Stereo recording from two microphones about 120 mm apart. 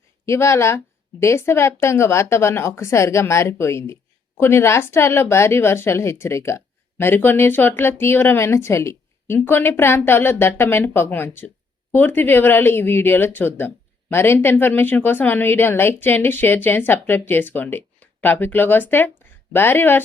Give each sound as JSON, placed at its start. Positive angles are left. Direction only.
{"t": 0.3, "sound": "speech", "side_deg": 25}